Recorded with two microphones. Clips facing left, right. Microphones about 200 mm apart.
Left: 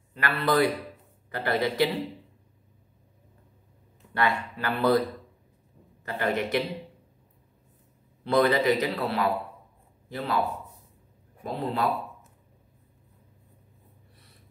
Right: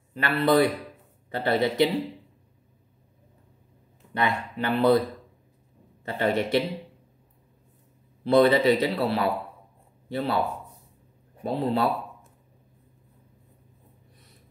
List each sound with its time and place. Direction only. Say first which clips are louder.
0.2 s speech: right 3 dB; 25° right (ahead or behind)
4.1 s speech: even; 20° right (ahead or behind)
6.0 s speech: right 3 dB; 25° right (ahead or behind)
8.3 s a man's voice: right 4 dB; 25° right (ahead or behind)
11.4 s speech: right 3 dB; 30° right (ahead or behind)